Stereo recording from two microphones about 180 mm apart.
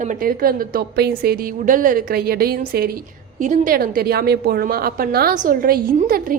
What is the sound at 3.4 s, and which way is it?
A woman's voice, 45° right (ahead or behind).